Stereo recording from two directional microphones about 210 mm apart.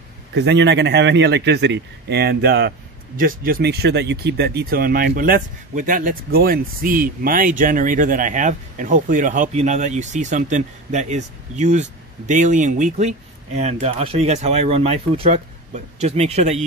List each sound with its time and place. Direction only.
0.3 s a man's voice: 55° right (ahead or behind); by 16.6 s 30° right (ahead or behind)